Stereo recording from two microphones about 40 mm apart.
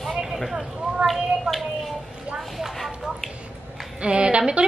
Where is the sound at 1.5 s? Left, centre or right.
Centre.